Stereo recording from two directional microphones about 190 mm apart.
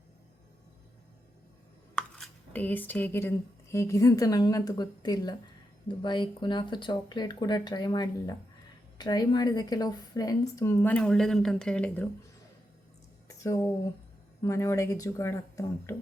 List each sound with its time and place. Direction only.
2.0 s a woman's voice: 5° left (ahead or behind)
13.2 s a sound: 15° left (ahead or behind)
14.4 s speech: 15° left (ahead or behind)